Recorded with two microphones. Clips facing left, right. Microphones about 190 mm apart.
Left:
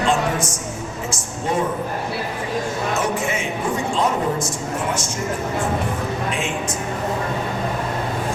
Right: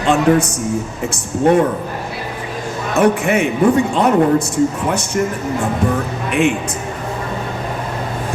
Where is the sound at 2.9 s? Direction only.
60° right (ahead or behind).